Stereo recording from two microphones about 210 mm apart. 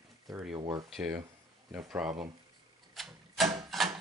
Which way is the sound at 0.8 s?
Centre (ahead or behind).